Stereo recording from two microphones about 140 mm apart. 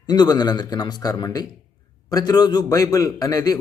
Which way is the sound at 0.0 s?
30° left (ahead or behind).